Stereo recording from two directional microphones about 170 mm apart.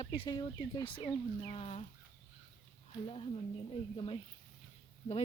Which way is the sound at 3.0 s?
35° left (ahead or behind).